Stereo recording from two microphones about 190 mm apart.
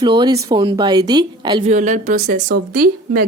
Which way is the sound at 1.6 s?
40° right (ahead or behind).